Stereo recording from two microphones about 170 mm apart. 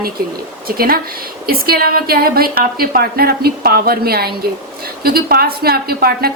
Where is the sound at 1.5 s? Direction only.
60° right (ahead or behind).